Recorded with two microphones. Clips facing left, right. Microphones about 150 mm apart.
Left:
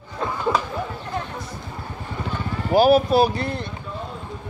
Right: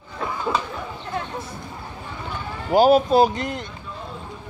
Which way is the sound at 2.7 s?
20° right (ahead or behind).